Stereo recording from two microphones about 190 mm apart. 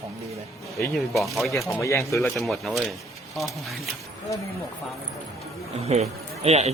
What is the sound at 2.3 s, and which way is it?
Speech, centre (ahead or behind).